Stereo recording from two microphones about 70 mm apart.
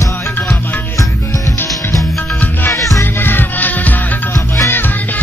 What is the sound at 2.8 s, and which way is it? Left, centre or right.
Music, left.